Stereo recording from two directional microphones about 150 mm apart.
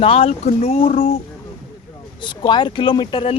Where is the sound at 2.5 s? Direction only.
30° left (ahead or behind).